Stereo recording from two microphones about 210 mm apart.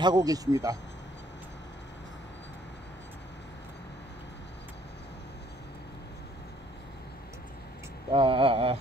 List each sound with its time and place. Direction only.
0.0 s speech: 20° right (ahead or behind)
8.1 s speech: 25° right (ahead or behind)